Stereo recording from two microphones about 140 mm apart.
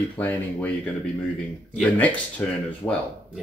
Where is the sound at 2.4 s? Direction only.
5° left (ahead or behind).